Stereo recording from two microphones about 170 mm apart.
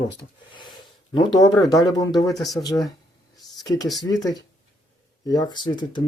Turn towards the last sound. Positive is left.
turn(degrees=25)  # may be behind; listen again after turning